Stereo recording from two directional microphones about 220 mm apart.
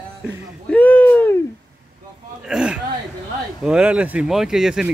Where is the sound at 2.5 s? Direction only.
5° right (ahead or behind).